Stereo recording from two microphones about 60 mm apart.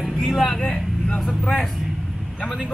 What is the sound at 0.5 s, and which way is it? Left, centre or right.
Vehicle, centre.